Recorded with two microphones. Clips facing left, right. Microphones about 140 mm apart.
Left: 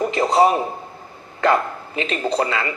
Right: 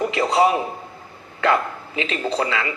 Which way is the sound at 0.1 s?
40° left (ahead or behind).